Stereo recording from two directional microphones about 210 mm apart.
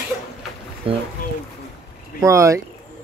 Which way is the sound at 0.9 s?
25° right (ahead or behind).